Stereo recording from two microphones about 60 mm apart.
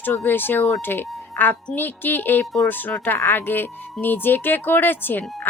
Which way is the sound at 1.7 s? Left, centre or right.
Left.